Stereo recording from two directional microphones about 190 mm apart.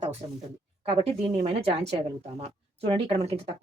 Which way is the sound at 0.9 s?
30° right (ahead or behind).